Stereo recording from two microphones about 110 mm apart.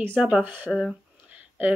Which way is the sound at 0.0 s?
15° right (ahead or behind).